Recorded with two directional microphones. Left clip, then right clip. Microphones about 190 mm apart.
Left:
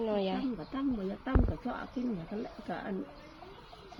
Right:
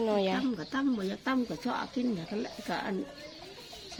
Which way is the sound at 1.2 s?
30° right (ahead or behind).